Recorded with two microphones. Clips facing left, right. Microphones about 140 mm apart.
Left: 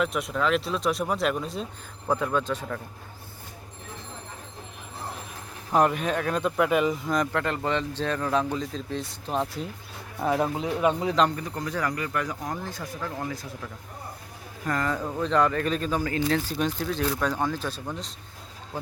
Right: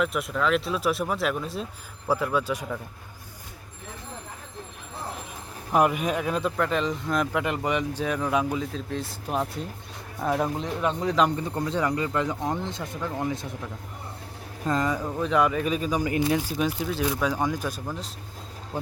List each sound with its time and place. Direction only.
0.0 s speech: centre (ahead or behind)
5.7 s speech: 10° right (ahead or behind)
6.6 s speech: 10° left (ahead or behind)
7.4 s speech: 15° right (ahead or behind); by 11.2 s 5° left (ahead or behind)
11.3 s speech: 25° right (ahead or behind)
14.7 s speech: 20° right (ahead or behind)
14.9 s speech: 5° right (ahead or behind)